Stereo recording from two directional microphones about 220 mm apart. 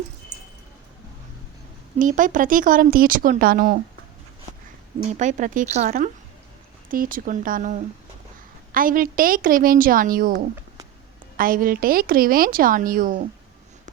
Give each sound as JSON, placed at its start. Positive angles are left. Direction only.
{"t": 0.3, "sound": "a sound", "side_deg": -20}
{"t": 2.0, "sound": "a woman's voice", "side_deg": -35}
{"t": 5.1, "sound": "a woman's voice", "side_deg": -35}
{"t": 6.9, "sound": "a woman's voice", "side_deg": -40}